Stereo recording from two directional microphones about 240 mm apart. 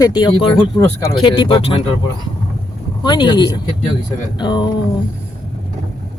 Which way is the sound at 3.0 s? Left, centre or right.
Centre.